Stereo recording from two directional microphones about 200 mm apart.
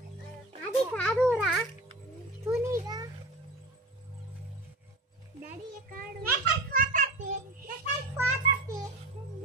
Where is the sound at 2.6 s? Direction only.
15° right (ahead or behind).